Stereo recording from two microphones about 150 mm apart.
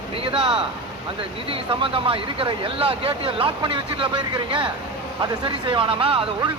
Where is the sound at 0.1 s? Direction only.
40° right (ahead or behind).